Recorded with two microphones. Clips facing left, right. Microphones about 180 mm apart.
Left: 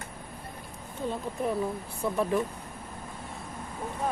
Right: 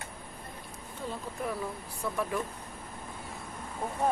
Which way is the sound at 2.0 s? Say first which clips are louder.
Left 5 dB; 25° left (ahead or behind).